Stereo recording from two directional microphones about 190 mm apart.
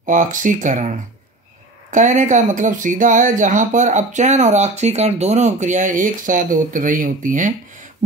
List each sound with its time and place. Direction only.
0.0 s speech: 45° right (ahead or behind)